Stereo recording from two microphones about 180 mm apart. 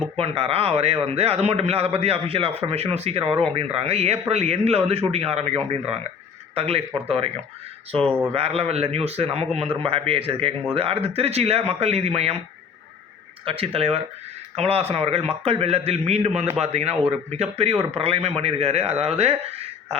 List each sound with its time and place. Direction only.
0.2 s speech: 35° right (ahead or behind)
7.9 s speech: 5° left (ahead or behind)
8.3 s speech: 35° right (ahead or behind)
13.4 s speech: 30° right (ahead or behind)